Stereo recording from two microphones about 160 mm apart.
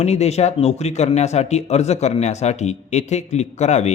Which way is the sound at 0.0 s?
45° left (ahead or behind).